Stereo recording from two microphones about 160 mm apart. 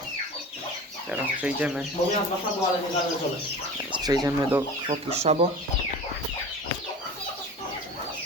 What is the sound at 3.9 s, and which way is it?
Speech, 25° right (ahead or behind).